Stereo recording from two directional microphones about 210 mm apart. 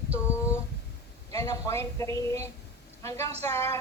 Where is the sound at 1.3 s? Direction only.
15° left (ahead or behind).